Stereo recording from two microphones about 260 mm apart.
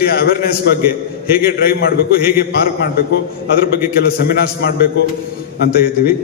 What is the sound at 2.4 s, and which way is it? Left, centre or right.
A man's voice, left.